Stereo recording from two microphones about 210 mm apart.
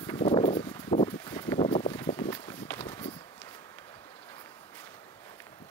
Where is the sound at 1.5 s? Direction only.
25° left (ahead or behind).